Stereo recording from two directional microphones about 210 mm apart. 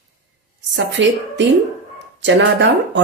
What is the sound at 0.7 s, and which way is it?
Speech, 55° right (ahead or behind).